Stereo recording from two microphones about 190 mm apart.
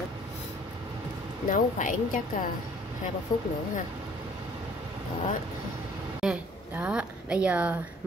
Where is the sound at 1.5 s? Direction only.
45° left (ahead or behind).